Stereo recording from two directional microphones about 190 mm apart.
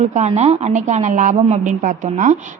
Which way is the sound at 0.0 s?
35° right (ahead or behind).